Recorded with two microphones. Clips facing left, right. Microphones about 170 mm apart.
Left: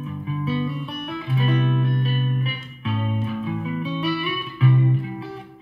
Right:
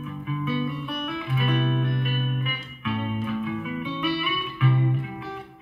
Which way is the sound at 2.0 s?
30° left (ahead or behind).